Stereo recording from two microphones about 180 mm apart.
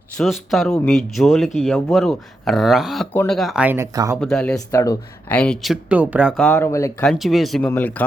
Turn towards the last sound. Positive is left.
turn(degrees=10)  # may be behind; listen again after turning